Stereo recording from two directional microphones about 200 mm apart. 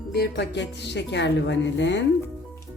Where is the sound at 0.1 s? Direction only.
55° left (ahead or behind).